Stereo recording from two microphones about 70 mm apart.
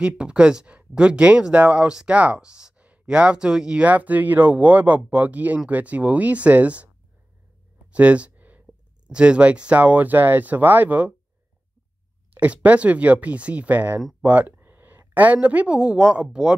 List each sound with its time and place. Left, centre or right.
0.0 s speech: centre
7.9 s a sound: centre
9.0 s speech: centre
12.4 s speech: right